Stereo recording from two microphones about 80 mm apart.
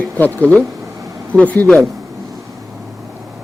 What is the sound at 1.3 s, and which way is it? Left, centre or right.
Speech, right.